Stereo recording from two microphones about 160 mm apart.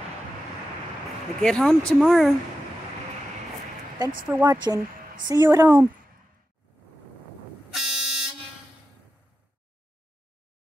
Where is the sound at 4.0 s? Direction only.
25° right (ahead or behind).